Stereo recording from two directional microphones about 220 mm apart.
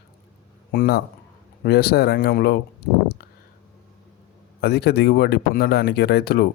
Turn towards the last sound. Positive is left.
turn(degrees=45)  # may be behind; listen again after turning